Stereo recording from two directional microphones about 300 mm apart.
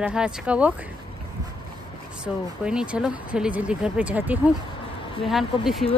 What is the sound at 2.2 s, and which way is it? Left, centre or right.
Speech, centre.